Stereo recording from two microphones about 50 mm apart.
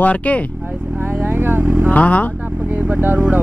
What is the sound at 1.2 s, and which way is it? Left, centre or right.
Vehicle, right.